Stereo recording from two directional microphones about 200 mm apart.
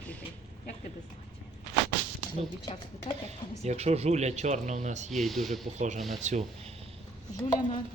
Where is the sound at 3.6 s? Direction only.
30° right (ahead or behind).